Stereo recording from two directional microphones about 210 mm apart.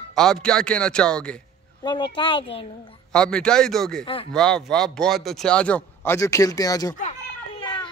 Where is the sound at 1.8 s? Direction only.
20° left (ahead or behind).